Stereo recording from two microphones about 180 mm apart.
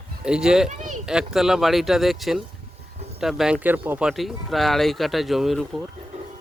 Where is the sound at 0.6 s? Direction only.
40° right (ahead or behind).